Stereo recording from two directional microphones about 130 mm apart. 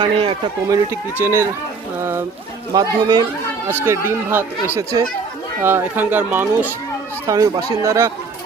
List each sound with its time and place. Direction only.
0.0 s speech: 45° right (ahead or behind)
0.7 s speech: 20° right (ahead or behind)
2.7 s speech: 30° right (ahead or behind)
3.7 s speech: 20° right (ahead or behind)
5.6 s speech: 15° right (ahead or behind)
7.3 s speech: 25° right (ahead or behind)